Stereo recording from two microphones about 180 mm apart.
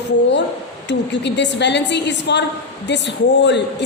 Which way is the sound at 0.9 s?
80° left.